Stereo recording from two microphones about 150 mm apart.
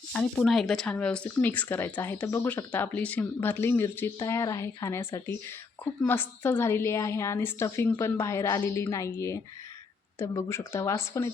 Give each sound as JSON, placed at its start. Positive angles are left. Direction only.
{"t": 0.1, "sound": "speech", "side_deg": 0}